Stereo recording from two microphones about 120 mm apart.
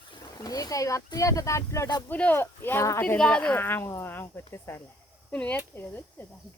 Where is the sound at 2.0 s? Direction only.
15° left (ahead or behind).